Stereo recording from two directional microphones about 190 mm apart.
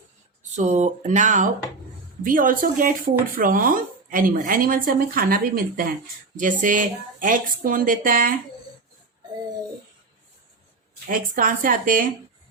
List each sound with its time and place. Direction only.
0.5 s speech: 40° right (ahead or behind)
11.1 s speech: 45° right (ahead or behind)